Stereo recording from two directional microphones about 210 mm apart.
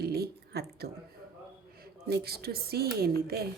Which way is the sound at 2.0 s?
50° right (ahead or behind).